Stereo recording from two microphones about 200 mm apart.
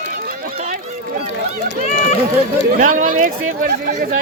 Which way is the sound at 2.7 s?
45° right (ahead or behind).